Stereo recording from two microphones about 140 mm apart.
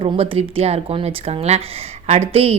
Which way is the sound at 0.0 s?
45° right (ahead or behind).